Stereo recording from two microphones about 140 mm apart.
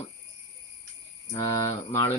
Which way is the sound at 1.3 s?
25° left (ahead or behind).